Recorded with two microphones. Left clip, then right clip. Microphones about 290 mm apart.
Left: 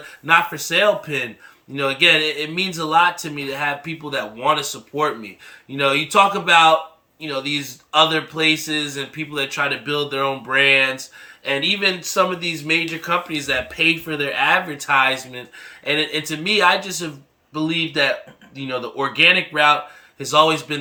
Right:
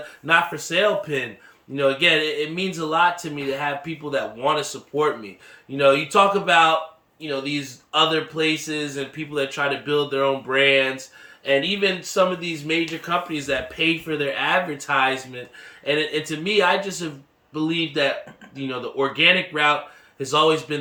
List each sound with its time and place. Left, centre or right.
0.3 s speech: centre